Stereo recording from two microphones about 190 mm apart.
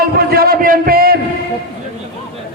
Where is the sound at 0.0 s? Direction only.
55° right (ahead or behind).